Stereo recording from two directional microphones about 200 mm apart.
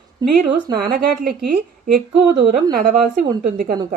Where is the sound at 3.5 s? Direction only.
45° right (ahead or behind).